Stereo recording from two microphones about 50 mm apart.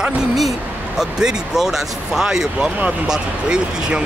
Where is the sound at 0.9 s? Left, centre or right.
Centre.